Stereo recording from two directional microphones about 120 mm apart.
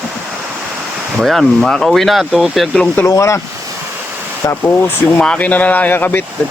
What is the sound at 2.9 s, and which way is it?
Speech, 25° left (ahead or behind).